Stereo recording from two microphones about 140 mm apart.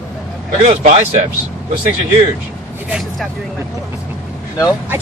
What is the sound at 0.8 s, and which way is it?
Speech, 65° right (ahead or behind).